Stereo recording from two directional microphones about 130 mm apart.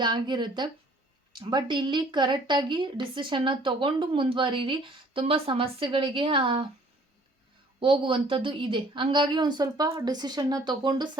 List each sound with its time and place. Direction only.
0.0 s a woman's voice: 35° right (ahead or behind)
7.8 s a woman's voice: 40° right (ahead or behind)